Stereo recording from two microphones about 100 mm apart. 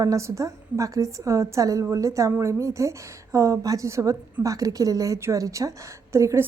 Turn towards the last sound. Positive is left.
turn(degrees=-30)  # may be behind; listen again after turning